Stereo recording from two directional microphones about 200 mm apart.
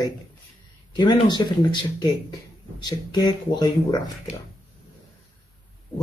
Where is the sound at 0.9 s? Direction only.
20° left (ahead or behind).